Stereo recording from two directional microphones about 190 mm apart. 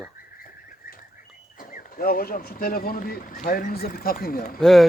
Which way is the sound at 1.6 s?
50° left (ahead or behind).